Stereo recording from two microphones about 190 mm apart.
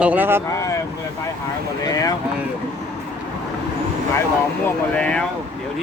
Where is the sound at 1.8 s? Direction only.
20° left (ahead or behind).